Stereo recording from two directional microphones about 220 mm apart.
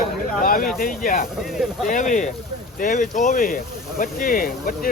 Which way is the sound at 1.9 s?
35° left (ahead or behind).